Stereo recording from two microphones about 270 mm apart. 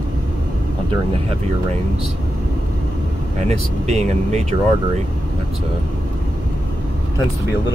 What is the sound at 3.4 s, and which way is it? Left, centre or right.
Speech, right.